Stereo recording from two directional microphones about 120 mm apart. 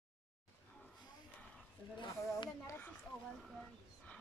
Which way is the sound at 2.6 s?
20° left (ahead or behind).